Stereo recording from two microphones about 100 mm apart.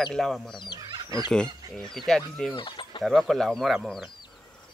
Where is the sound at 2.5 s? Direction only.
55° left (ahead or behind).